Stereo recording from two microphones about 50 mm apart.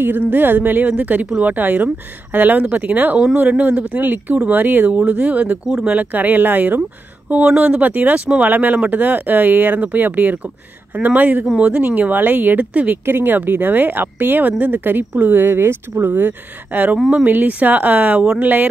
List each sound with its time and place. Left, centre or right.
0.0 s speech: right
3.9 s speech: right
6.1 s speech: right
7.4 s speech: right
13.0 s speech: right
16.2 s speech: right